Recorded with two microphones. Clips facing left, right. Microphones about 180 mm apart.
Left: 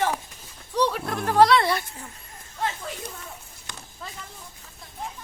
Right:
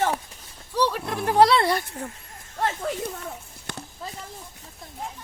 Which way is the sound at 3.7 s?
60° right (ahead or behind).